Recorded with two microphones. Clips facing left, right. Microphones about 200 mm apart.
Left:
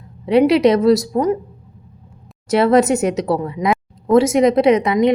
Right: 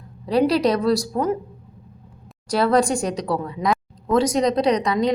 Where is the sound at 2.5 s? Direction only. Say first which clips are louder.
Left 5 dB; 25° left (ahead or behind).